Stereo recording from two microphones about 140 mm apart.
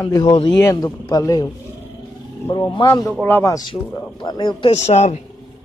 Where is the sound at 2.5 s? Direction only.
35° left (ahead or behind).